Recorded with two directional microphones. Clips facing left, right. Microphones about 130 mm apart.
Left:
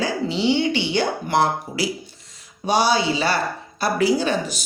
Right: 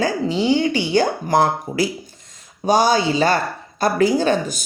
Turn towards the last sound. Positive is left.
turn(degrees=-45)  # may be behind; listen again after turning